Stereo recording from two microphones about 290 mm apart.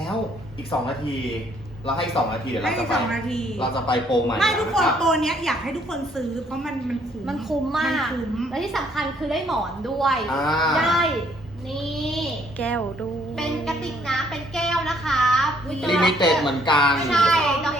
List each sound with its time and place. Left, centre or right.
2.1 s a woman's voice: centre
3.6 s speech: centre
4.4 s a woman's voice: centre